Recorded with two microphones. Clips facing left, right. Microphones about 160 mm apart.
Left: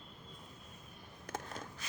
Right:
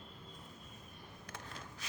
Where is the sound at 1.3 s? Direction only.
45° left (ahead or behind).